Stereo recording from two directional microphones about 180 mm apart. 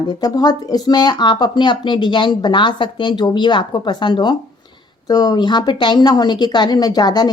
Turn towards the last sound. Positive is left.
turn(degrees=25)  # may be behind; listen again after turning